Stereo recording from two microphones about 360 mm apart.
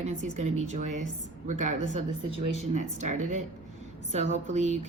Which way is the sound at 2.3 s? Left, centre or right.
Right.